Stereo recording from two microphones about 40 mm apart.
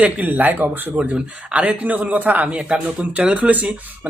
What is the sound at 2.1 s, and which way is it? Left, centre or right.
Speech, right.